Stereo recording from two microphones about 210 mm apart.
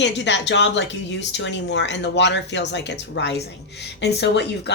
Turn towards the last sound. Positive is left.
turn(degrees=55)  # may be behind; listen again after turning